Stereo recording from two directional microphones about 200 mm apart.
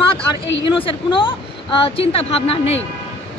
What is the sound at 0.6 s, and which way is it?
Speech, 25° left (ahead or behind).